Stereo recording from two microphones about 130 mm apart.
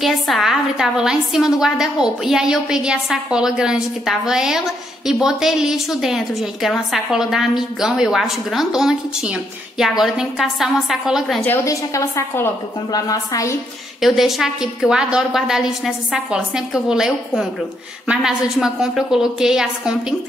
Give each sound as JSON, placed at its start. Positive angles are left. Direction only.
{"t": 0.0, "sound": "a woman's voice", "side_deg": 0}
{"t": 11.4, "sound": "a woman's voice", "side_deg": 20}
{"t": 14.0, "sound": "a woman's voice", "side_deg": 0}